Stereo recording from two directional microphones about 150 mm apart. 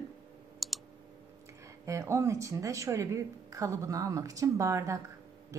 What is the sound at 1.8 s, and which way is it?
A woman's voice, 20° right (ahead or behind).